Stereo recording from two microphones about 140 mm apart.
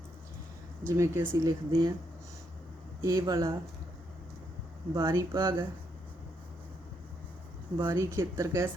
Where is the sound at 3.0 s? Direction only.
25° right (ahead or behind).